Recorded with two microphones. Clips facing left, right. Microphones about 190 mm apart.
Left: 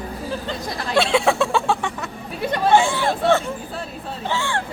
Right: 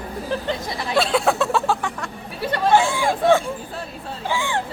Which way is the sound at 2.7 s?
5° right (ahead or behind).